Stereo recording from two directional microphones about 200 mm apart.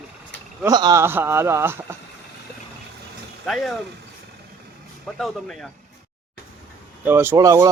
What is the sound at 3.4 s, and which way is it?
Speech, centre (ahead or behind).